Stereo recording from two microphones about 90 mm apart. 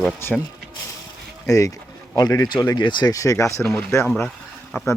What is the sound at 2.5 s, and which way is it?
Speech, 55° left (ahead or behind).